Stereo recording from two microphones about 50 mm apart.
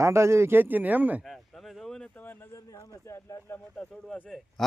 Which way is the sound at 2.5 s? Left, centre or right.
Left.